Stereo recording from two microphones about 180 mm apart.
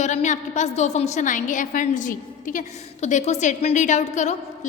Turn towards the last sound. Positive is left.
turn(degrees=40)  # may be behind; listen again after turning